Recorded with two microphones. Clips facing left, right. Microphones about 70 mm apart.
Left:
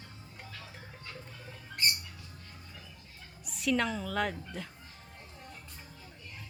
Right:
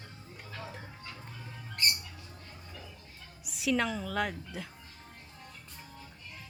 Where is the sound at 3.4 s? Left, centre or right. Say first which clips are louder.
Even; centre.